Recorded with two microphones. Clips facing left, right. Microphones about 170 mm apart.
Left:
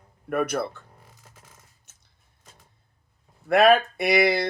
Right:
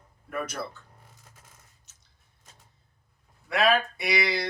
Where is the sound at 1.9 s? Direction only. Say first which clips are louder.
Left 2 dB; 55° left (ahead or behind).